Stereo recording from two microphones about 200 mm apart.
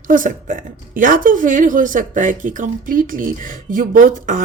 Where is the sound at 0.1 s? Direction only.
40° right (ahead or behind).